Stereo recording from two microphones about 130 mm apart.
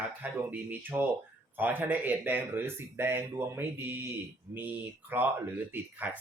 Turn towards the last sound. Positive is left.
turn(degrees=-10)  # may be behind; listen again after turning